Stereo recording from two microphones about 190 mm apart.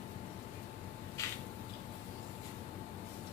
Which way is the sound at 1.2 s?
15° left (ahead or behind).